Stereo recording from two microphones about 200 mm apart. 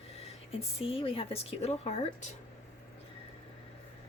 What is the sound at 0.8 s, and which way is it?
Speech, 30° left (ahead or behind).